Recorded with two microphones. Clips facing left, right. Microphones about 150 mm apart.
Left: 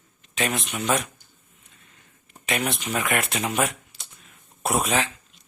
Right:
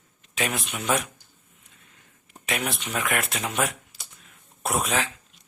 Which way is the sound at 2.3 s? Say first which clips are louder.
Left 2 dB; centre (ahead or behind).